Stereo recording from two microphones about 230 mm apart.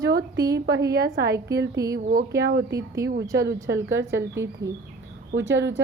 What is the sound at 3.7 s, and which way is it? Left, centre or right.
Speech, right.